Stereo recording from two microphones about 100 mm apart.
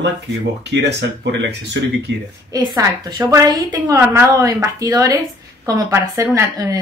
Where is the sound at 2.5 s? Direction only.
40° right (ahead or behind).